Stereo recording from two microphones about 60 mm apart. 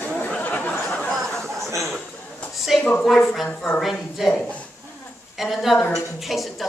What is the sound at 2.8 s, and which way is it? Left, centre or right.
Speech, centre.